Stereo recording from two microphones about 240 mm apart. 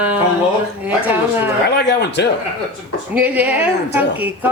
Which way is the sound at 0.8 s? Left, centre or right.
Centre.